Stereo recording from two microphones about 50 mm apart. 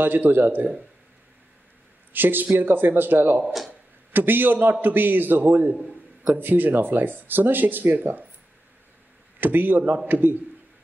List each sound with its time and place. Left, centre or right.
0.0 s speech: right
2.1 s speech: right
9.4 s speech: right